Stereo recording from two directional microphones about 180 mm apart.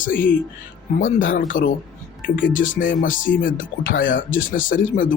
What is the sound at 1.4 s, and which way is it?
Speech, 50° left (ahead or behind).